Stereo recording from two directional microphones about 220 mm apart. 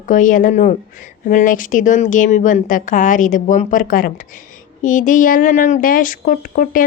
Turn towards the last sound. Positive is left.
turn(degrees=40)  # may be behind; listen again after turning